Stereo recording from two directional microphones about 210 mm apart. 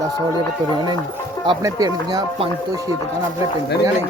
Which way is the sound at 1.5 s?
20° right (ahead or behind).